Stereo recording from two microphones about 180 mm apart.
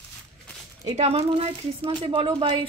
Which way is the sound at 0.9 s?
35° right (ahead or behind).